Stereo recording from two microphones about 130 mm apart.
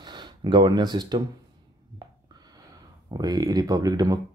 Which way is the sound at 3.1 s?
30° right (ahead or behind).